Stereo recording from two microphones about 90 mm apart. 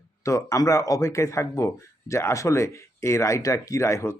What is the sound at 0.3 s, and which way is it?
Speech, 35° left (ahead or behind).